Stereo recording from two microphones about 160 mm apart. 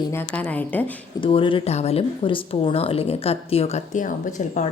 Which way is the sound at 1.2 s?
35° left (ahead or behind).